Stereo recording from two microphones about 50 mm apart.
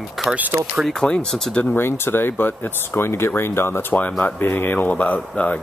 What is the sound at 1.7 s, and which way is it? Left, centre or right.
Speech, left.